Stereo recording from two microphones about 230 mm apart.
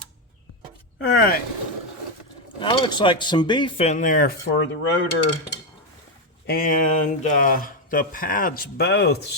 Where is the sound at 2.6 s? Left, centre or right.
Centre; by 4.3 s left.